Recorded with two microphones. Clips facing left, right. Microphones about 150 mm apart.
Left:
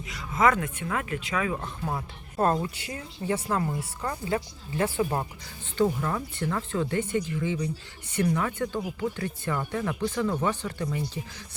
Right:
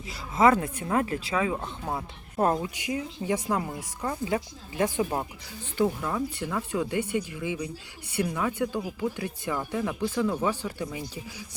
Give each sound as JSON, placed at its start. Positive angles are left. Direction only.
{"t": 0.1, "sound": "speech", "side_deg": -30}